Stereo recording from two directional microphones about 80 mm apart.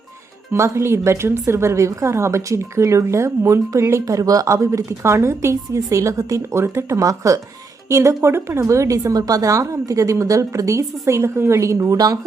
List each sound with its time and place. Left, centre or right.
0.5 s a woman's voice: right